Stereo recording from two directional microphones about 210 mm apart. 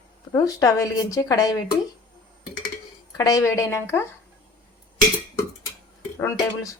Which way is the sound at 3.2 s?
15° left (ahead or behind).